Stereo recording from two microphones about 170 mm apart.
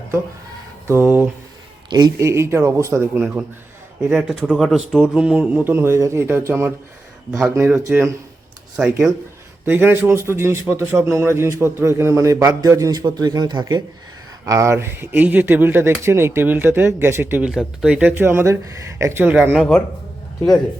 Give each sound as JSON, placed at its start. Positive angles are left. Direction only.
{"t": 0.9, "sound": "speech", "side_deg": -15}
{"t": 1.9, "sound": "speech", "side_deg": -25}
{"t": 7.9, "sound": "speech", "side_deg": -15}